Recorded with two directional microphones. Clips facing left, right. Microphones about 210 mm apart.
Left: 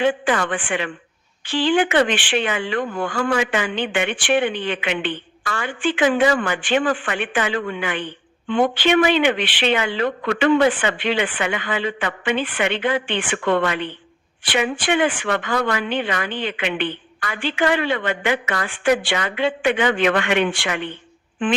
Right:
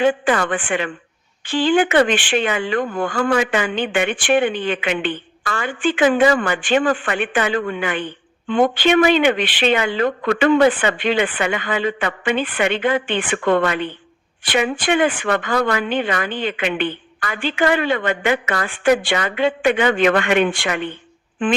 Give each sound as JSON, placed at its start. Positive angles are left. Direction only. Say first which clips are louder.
{"t": 0.0, "sound": "speech", "louder": "right 2 dB", "side_deg": -45}